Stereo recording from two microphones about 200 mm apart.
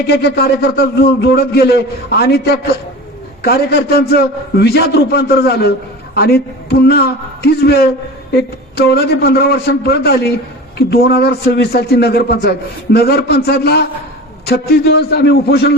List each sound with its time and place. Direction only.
0.1 s a man's voice: 55° left (ahead or behind)